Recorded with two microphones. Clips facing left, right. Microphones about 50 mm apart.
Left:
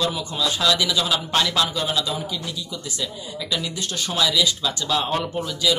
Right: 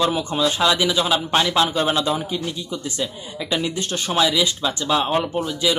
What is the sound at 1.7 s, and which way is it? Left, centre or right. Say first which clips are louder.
Speech: right 5 dB; right.